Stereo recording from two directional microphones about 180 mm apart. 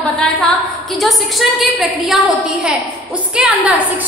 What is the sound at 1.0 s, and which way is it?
A woman's voice, centre (ahead or behind).